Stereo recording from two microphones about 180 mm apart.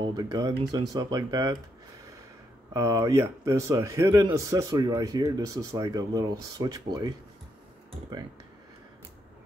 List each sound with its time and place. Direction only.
0.0 s speech: 20° right (ahead or behind)
2.7 s speech: 15° right (ahead or behind)